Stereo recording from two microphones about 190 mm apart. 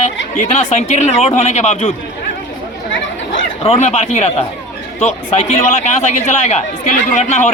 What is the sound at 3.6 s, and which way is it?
Speech, 35° left (ahead or behind).